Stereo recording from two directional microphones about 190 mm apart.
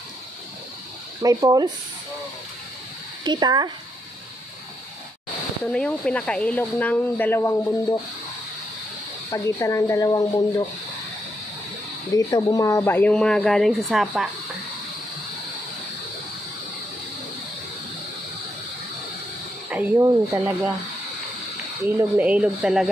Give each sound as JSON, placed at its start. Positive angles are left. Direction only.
{"t": 1.2, "sound": "speech", "side_deg": -15}
{"t": 3.3, "sound": "speech", "side_deg": -20}
{"t": 5.7, "sound": "speech", "side_deg": 5}
{"t": 9.3, "sound": "speech", "side_deg": 15}
{"t": 12.3, "sound": "speech", "side_deg": 20}
{"t": 19.7, "sound": "speech", "side_deg": -15}
{"t": 21.8, "sound": "speech", "side_deg": -5}